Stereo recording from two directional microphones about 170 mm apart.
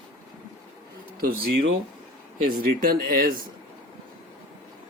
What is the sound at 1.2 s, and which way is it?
Speech, 90° right.